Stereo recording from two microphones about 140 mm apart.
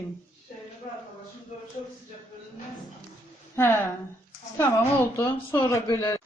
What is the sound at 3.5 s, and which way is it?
A woman's voice, 20° left (ahead or behind).